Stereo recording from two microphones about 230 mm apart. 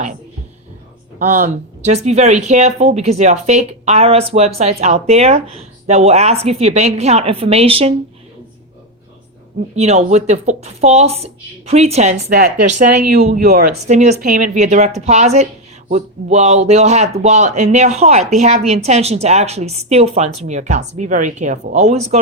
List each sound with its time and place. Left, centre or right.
1.2 s speech: right
9.6 s speech: right
13.4 s speech: right
13.8 s speech: right